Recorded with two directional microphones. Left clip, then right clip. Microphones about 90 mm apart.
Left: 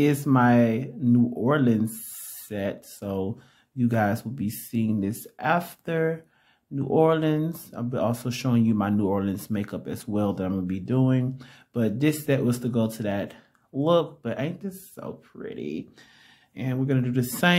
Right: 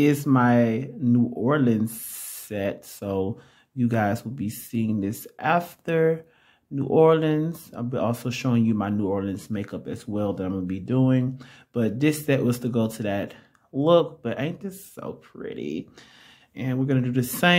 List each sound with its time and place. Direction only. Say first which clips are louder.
0.0 s speech: right 1 dB; 5° right (ahead or behind)
2.4 s speech: right 2 dB; 20° right (ahead or behind)
5.9 s speech: right 5 dB; 20° right (ahead or behind)
16.8 s speech: right 1 dB; 15° right (ahead or behind)